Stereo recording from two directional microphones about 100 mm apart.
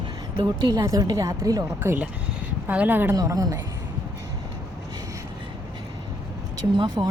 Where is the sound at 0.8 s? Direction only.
40° right (ahead or behind).